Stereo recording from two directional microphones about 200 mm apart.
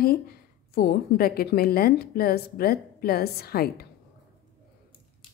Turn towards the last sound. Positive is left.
turn(degrees=50)  # may be behind; listen again after turning